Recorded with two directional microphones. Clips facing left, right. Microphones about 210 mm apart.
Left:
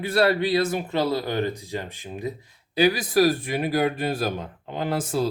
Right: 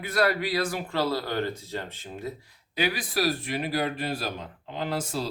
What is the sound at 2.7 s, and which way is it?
Speech, 40° left (ahead or behind).